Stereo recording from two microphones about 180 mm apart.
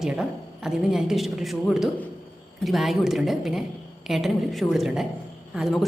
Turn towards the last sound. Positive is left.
turn(degrees=-5)  # may be behind; listen again after turning